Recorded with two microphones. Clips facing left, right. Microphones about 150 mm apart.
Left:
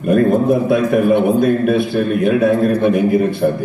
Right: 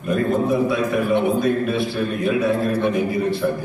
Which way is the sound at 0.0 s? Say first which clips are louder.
Left 7 dB; 55° left (ahead or behind).